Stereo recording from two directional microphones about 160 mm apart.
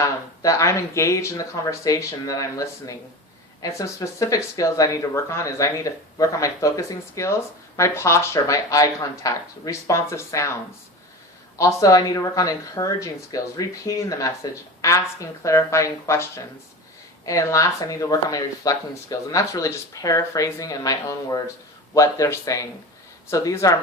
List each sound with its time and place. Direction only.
0.0 s speech: 20° left (ahead or behind)
11.5 s speech: 20° left (ahead or behind)